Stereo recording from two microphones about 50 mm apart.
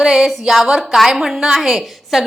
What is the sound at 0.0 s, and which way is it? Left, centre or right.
A woman's voice, centre.